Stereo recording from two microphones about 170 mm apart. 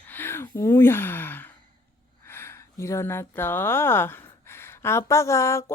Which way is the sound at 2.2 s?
15° left (ahead or behind).